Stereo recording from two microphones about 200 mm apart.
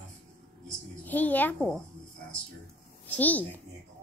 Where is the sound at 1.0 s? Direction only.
10° left (ahead or behind).